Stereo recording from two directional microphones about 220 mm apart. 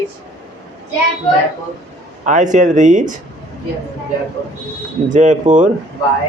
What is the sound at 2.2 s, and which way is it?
Speech, 35° right (ahead or behind).